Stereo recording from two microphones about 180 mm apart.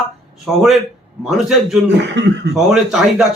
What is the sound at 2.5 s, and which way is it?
Speech, centre (ahead or behind).